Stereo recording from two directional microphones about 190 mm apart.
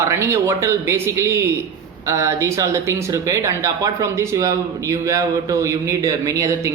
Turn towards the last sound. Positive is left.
turn(degrees=-15)  # may be behind; listen again after turning